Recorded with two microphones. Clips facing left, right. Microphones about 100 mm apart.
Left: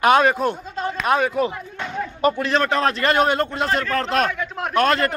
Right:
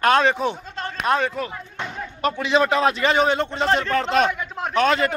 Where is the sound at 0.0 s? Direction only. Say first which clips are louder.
Left 2 dB; 10° left (ahead or behind).